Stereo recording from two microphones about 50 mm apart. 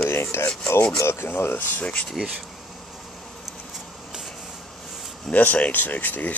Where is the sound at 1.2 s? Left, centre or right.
Left.